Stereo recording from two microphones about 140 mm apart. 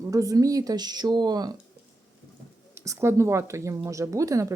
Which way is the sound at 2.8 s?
20° right (ahead or behind).